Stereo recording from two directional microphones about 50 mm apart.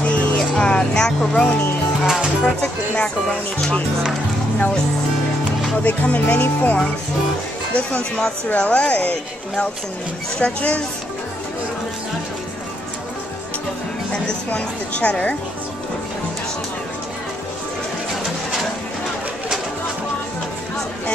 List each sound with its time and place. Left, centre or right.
0.0 s music: left
0.6 s music: centre
1.3 s speech: left
5.8 s speech: left
7.7 s speech: left
10.4 s speech: left
14.1 s speech: left